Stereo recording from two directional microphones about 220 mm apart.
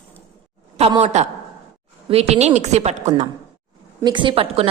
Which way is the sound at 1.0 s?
30° right (ahead or behind).